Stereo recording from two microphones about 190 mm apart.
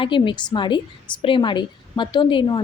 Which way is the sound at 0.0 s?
25° left (ahead or behind).